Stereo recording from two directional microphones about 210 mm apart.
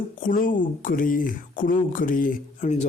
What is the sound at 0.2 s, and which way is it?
A man's voice, 40° left (ahead or behind).